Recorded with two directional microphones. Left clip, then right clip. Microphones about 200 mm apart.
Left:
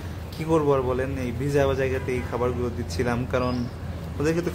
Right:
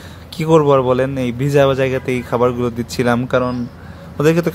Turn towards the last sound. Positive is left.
turn(degrees=-40)  # may be behind; listen again after turning